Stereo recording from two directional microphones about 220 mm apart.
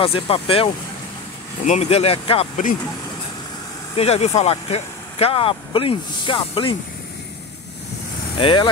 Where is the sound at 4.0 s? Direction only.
30° left (ahead or behind).